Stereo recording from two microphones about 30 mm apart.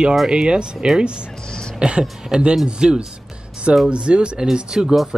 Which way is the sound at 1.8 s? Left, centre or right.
Right.